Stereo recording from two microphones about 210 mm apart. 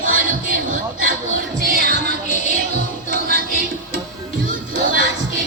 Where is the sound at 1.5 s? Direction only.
40° right (ahead or behind).